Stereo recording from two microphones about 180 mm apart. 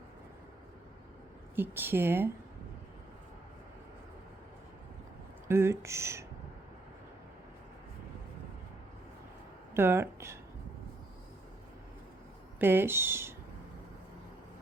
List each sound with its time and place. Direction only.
1.5 s speech: 10° right (ahead or behind)
5.5 s speech: 15° right (ahead or behind)
9.7 s speech: 15° right (ahead or behind)
12.5 s speech: 10° right (ahead or behind)